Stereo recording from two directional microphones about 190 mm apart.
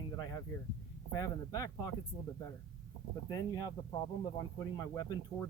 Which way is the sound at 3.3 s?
20° left (ahead or behind).